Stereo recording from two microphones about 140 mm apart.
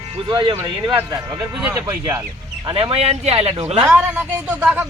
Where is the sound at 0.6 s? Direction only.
25° right (ahead or behind).